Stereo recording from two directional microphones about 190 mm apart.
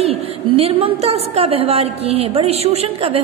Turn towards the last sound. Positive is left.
turn(degrees=-30)  # may be behind; listen again after turning